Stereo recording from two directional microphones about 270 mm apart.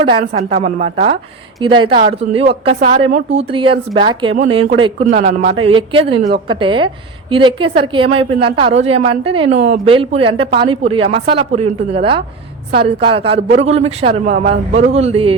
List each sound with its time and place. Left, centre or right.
0.0 s a woman's voice: right